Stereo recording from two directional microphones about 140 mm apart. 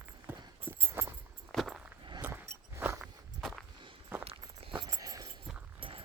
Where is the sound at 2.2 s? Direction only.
10° right (ahead or behind).